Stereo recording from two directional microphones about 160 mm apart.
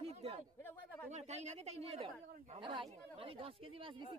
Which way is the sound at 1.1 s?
45° right (ahead or behind).